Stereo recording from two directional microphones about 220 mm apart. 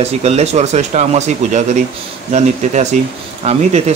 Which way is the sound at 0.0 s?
30° right (ahead or behind).